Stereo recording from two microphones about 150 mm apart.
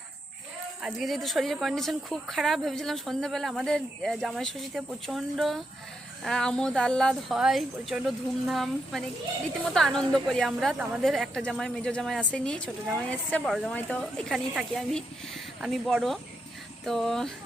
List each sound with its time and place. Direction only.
0.8 s speech: centre (ahead or behind)